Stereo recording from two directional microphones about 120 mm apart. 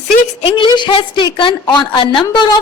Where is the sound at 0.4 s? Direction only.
45° left (ahead or behind).